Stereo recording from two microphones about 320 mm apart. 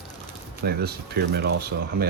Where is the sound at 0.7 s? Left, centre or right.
Right.